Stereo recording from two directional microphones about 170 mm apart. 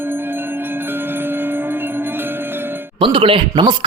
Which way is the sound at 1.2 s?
10° right (ahead or behind).